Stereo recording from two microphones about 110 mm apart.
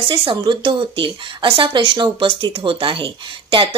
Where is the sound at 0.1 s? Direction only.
50° right (ahead or behind).